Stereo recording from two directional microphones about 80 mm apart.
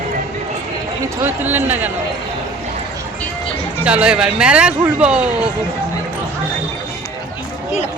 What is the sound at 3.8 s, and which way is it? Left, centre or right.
Speech, centre.